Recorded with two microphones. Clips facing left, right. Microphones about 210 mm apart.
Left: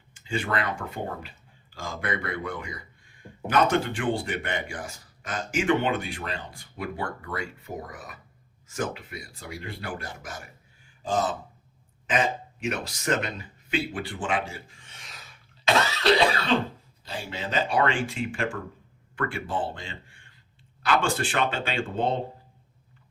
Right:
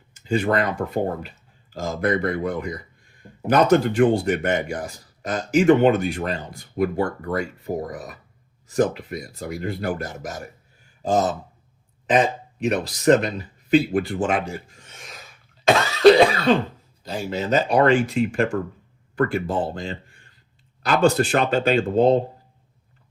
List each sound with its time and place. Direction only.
0.1 s a man's voice: 40° right (ahead or behind)
15.6 s cough: 50° right (ahead or behind)
17.0 s a man's voice: 40° right (ahead or behind)